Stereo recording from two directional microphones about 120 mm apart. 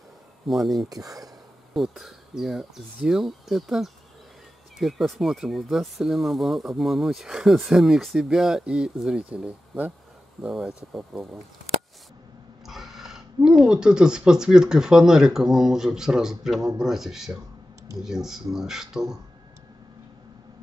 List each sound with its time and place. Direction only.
0.5 s speech: centre (ahead or behind)
0.8 s speech: 30° right (ahead or behind)
1.7 s speech: 5° right (ahead or behind)
12.6 s speech: centre (ahead or behind)